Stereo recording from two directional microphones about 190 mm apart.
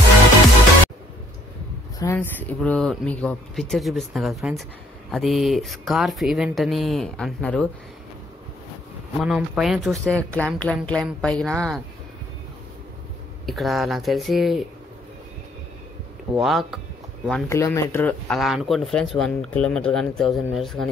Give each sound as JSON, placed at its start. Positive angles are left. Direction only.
{"t": 2.0, "sound": "speech", "side_deg": 15}
{"t": 9.2, "sound": "speech", "side_deg": 0}
{"t": 13.5, "sound": "speech", "side_deg": 0}
{"t": 16.3, "sound": "speech", "side_deg": 0}
{"t": 17.5, "sound": "speech", "side_deg": 15}
{"t": 18.4, "sound": "speech", "side_deg": 0}